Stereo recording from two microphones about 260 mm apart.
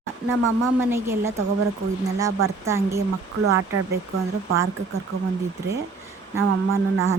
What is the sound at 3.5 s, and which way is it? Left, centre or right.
Speech, right.